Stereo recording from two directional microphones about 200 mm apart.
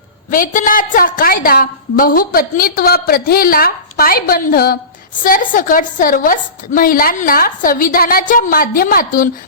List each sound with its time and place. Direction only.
0.3 s a woman's voice: 40° left (ahead or behind)